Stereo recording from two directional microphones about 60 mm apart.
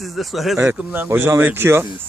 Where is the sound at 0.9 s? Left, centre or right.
Right.